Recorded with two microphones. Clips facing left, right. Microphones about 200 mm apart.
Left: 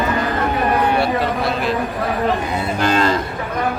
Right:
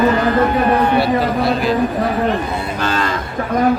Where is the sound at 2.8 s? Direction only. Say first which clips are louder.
Left 4 dB; 15° left (ahead or behind).